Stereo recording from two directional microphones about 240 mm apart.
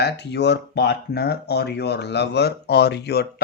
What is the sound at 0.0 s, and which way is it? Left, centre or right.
Speech, left.